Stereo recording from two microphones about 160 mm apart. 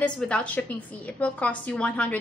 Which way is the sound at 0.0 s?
5° left (ahead or behind).